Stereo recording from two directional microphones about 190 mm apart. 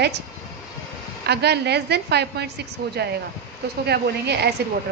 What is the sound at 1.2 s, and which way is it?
A woman's voice, 60° right (ahead or behind).